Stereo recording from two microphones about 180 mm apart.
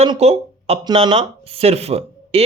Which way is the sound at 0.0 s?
35° right (ahead or behind).